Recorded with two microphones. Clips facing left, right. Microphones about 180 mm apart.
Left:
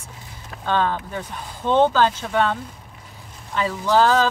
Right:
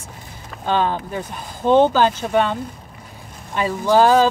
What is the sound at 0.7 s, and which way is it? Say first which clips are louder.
Speech: right 2 dB; 15° right (ahead or behind).